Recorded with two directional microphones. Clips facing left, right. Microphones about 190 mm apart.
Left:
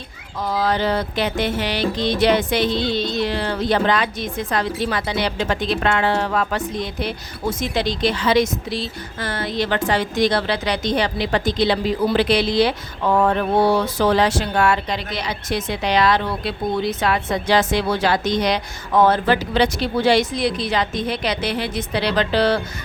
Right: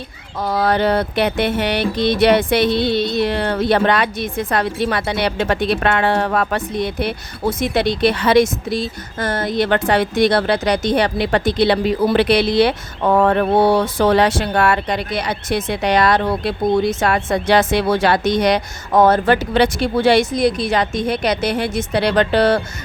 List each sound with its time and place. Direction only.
0.3 s music: 65° right (ahead or behind)
8.7 s music: 45° right (ahead or behind)
15.7 s speech: 50° right (ahead or behind)
17.3 s music: 65° right (ahead or behind)
18.9 s speech: 40° right (ahead or behind)